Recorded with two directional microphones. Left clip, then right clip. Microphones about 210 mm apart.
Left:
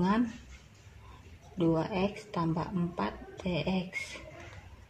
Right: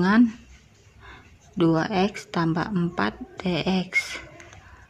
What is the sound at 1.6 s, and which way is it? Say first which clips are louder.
Speech: right 8 dB; 55° right (ahead or behind).